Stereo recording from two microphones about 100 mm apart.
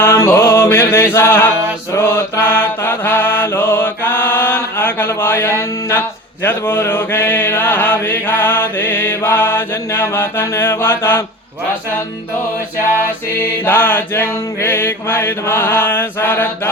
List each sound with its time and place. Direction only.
0.0 s music: 25° left (ahead or behind)
2.0 s mantra: 25° left (ahead or behind)
13.7 s mantra: 20° left (ahead or behind)